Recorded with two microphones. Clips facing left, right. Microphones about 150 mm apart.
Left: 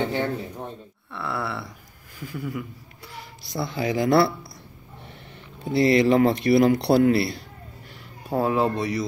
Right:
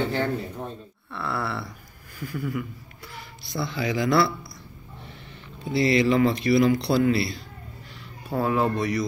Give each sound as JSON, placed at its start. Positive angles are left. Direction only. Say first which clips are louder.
{"t": 1.1, "sound": "a sound", "louder": "even", "side_deg": 20}
{"t": 2.1, "sound": "speech", "louder": "right 2 dB", "side_deg": 20}
{"t": 3.5, "sound": "speech", "louder": "left 2 dB", "side_deg": 45}
{"t": 5.7, "sound": "speech", "louder": "left 3 dB", "side_deg": 55}
{"t": 8.3, "sound": "speech", "louder": "left 1 dB", "side_deg": 35}